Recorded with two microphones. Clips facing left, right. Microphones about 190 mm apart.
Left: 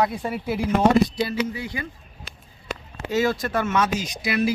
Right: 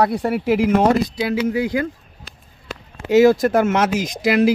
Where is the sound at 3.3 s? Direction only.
45° right (ahead or behind).